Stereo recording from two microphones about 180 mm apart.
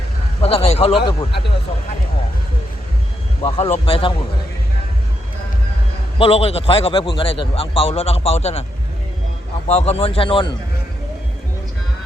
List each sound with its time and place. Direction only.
0.4 s a man's voice: 35° left (ahead or behind)
3.4 s a man's voice: 35° left (ahead or behind)
6.1 s a man's voice: 30° left (ahead or behind)
9.6 s a man's voice: 35° left (ahead or behind)